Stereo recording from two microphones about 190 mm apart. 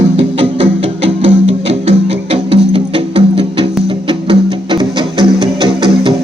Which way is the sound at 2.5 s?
30° right (ahead or behind).